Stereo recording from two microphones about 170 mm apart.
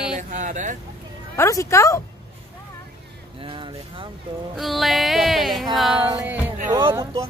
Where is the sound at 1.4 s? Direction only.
20° left (ahead or behind).